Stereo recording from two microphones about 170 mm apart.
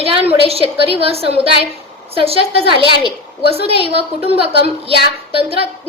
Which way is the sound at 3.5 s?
35° right (ahead or behind).